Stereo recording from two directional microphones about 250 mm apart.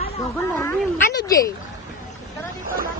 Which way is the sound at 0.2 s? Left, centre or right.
Centre.